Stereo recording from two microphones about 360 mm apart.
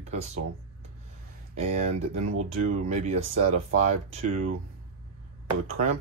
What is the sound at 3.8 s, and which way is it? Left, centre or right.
Speech, centre.